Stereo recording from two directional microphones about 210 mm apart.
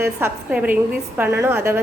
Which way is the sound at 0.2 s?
10° right (ahead or behind).